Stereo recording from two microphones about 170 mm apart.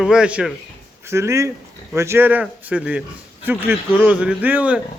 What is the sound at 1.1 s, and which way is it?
A man's voice, 15° right (ahead or behind).